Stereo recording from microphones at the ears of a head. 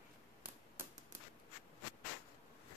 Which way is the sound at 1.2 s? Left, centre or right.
Left.